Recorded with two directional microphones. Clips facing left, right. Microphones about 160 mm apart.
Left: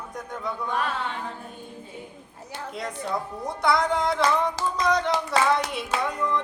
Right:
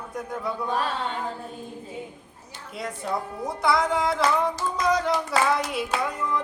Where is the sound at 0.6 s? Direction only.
30° right (ahead or behind).